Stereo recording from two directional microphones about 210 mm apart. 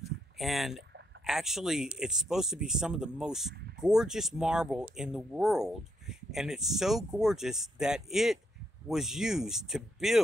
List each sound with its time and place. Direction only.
0.4 s speech: centre (ahead or behind)